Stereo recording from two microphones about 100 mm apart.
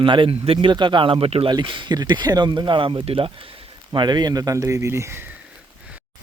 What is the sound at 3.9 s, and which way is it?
Speech, 45° right (ahead or behind).